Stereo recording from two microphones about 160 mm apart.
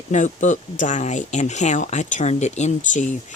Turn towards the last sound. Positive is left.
turn(degrees=50)  # may be behind; listen again after turning